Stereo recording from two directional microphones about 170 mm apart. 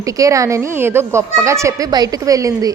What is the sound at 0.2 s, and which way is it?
A woman's voice, 20° right (ahead or behind).